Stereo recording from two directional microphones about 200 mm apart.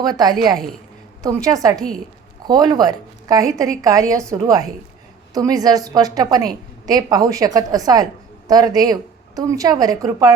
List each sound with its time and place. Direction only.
0.0 s a woman's voice: 20° right (ahead or behind)
1.5 s a woman's voice: 15° right (ahead or behind)